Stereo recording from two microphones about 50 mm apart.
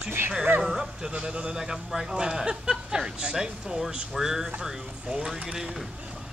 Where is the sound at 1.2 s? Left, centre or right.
Right.